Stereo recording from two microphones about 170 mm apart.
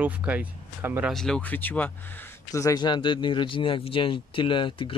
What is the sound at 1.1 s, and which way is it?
Speech, 5° left (ahead or behind).